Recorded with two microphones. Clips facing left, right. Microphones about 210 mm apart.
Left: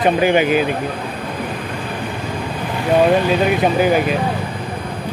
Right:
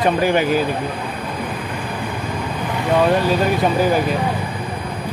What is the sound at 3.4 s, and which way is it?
Speech, 20° left (ahead or behind).